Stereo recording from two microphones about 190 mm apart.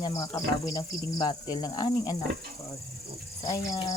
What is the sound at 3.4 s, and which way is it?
Speech, 20° left (ahead or behind).